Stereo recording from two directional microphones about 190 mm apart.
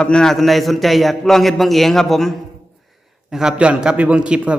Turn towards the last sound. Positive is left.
turn(degrees=-5)  # may be behind; listen again after turning